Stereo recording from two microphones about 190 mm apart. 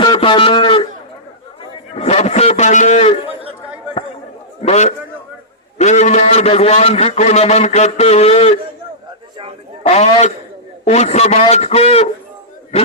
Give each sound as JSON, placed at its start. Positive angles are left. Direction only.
{"t": 0.0, "sound": "a man's voice", "side_deg": 25}
{"t": 1.9, "sound": "a man's voice", "side_deg": 35}
{"t": 4.6, "sound": "a man's voice", "side_deg": 35}
{"t": 9.8, "sound": "a man's voice", "side_deg": 35}